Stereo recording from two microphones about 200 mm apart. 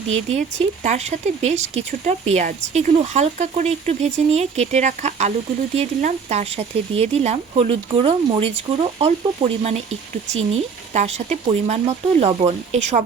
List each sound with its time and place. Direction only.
0.3 s speech: 35° right (ahead or behind)
9.9 s speech: 85° right
10.6 s speech: 30° right (ahead or behind)